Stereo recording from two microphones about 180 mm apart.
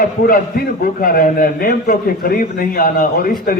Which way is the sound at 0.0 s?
55° left (ahead or behind).